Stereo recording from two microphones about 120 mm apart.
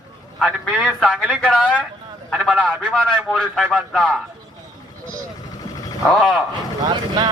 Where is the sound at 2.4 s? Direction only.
Centre (ahead or behind).